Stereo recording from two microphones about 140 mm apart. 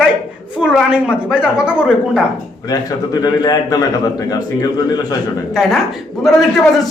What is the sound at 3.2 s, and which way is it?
A man's voice, 30° left (ahead or behind).